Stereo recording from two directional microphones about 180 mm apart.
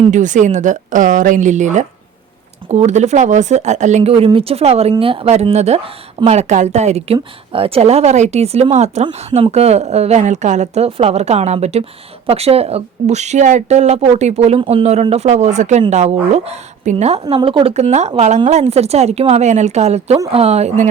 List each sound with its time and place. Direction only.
0.1 s speech: 45° right (ahead or behind)